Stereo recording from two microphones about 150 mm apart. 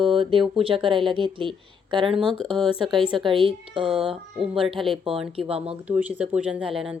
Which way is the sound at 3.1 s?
35° right (ahead or behind).